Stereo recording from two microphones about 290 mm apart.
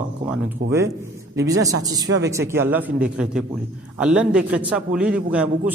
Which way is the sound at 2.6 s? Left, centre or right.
Centre.